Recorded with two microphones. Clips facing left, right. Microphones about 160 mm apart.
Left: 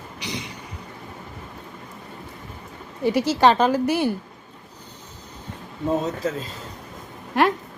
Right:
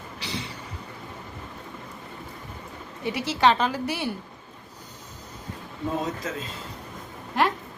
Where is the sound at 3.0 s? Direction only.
40° left (ahead or behind).